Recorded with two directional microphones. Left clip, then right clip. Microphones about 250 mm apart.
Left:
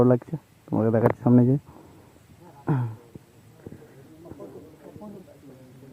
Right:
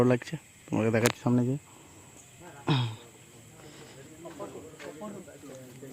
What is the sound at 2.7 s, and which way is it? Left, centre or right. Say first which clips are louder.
Speech: even; centre.